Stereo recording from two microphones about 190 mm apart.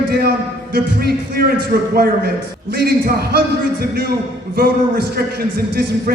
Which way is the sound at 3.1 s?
55° right (ahead or behind).